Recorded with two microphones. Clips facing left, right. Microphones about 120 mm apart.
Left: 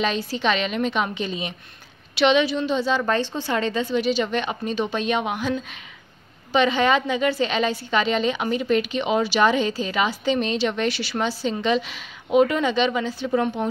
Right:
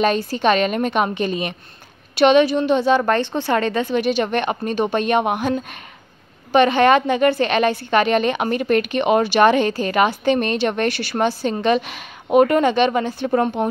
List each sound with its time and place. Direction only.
0.0 s a woman's voice: 50° right (ahead or behind)